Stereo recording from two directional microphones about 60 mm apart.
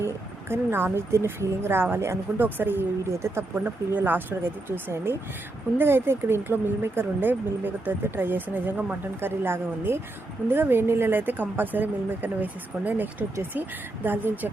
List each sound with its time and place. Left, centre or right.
0.0 s speech: right
3.0 s speech: right
3.5 s speech: right